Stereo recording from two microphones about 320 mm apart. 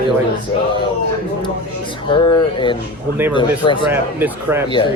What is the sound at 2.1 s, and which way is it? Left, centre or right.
Speech, centre.